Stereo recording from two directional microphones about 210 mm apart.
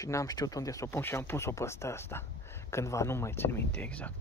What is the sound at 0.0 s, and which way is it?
Speech, 15° left (ahead or behind).